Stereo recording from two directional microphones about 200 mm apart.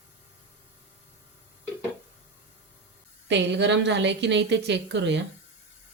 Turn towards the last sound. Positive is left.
turn(degrees=-60)  # may be behind; listen again after turning